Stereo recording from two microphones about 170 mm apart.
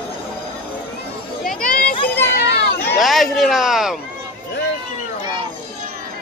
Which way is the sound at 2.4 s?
85° left.